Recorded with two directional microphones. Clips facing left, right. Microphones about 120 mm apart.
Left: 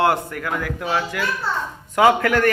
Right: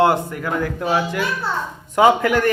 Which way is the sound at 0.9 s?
15° right (ahead or behind).